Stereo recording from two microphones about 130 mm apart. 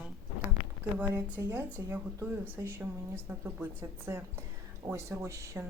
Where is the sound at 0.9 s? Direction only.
15° right (ahead or behind).